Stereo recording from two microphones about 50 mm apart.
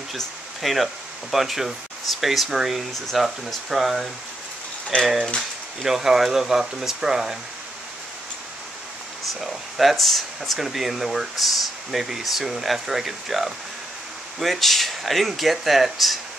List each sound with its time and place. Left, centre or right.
0.1 s speech: centre
4.9 s speech: left
5.9 s speech: centre
9.2 s speech: centre